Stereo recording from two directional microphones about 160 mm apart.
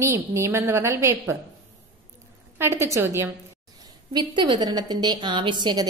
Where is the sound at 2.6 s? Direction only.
15° right (ahead or behind).